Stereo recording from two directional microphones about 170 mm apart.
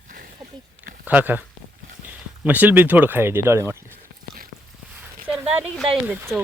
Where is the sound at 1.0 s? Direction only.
10° right (ahead or behind).